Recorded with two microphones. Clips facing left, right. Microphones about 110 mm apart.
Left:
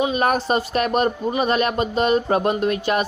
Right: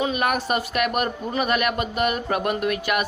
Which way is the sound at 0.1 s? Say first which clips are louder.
Left 3 dB; 30° left (ahead or behind).